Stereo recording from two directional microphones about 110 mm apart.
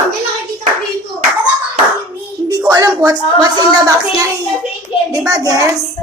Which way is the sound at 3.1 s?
40° right (ahead or behind).